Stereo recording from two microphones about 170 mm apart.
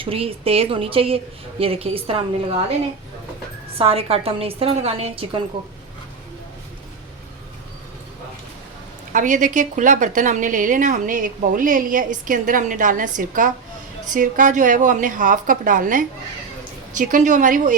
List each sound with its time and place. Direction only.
0.0 s a woman's voice: 35° right (ahead or behind)
3.8 s a woman's voice: 35° right (ahead or behind)
9.1 s a woman's voice: 50° right (ahead or behind)